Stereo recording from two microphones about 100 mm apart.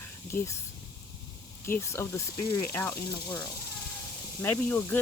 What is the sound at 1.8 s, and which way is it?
Speech, 25° left (ahead or behind).